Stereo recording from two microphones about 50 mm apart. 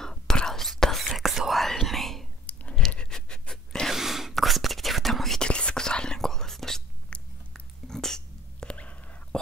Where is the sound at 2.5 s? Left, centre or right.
Left.